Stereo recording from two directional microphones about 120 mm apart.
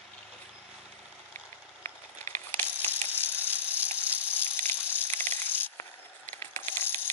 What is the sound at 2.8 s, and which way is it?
Ratchet, 20° left (ahead or behind).